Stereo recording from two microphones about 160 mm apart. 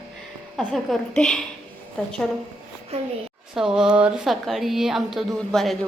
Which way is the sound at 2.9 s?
40° right (ahead or behind).